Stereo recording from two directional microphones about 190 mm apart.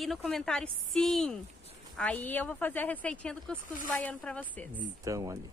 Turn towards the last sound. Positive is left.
turn(degrees=-15)  # may be behind; listen again after turning